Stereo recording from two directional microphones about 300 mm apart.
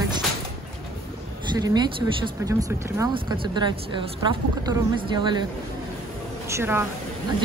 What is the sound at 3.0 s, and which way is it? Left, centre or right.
Speech, centre.